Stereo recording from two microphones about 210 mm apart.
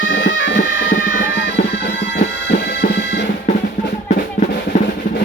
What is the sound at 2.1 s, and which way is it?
Bagpipes, 55° left (ahead or behind).